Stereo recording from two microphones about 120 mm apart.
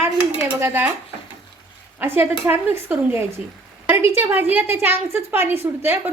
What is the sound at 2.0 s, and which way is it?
A woman's voice, 20° right (ahead or behind).